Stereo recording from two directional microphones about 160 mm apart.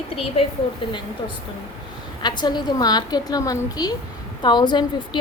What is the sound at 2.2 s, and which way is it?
Speech, 25° left (ahead or behind).